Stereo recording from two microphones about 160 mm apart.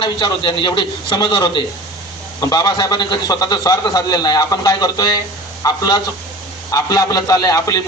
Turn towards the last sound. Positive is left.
turn(degrees=20)  # may be behind; listen again after turning